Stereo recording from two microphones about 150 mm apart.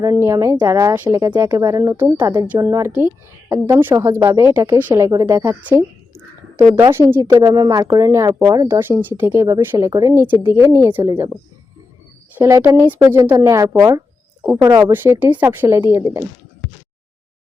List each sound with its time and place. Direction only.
0.0 s a woman's voice: 20° right (ahead or behind)
12.3 s speech: 20° right (ahead or behind)
14.9 s speech: 15° right (ahead or behind)